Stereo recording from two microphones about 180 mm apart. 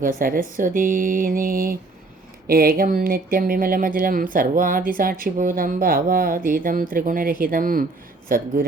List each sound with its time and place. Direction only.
0.0 s speech: 50° right (ahead or behind)